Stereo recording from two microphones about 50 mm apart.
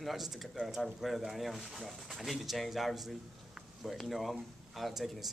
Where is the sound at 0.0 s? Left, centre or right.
Centre.